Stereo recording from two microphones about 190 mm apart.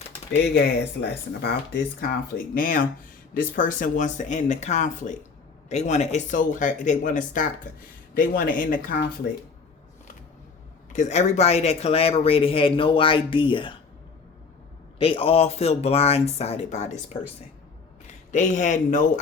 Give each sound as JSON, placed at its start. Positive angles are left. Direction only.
{"t": 1.4, "sound": "speech", "side_deg": 55}
{"t": 10.9, "sound": "speech", "side_deg": 35}
{"t": 14.9, "sound": "speech", "side_deg": 30}